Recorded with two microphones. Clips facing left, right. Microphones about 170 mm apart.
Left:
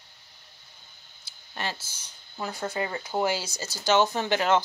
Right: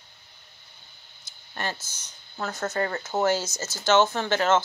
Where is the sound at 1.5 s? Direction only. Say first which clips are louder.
Right 1 dB; 10° left (ahead or behind).